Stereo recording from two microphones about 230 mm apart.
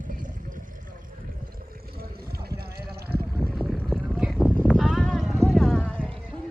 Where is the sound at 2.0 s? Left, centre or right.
Right.